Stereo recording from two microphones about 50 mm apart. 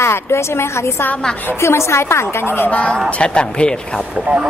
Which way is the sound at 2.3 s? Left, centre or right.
Left.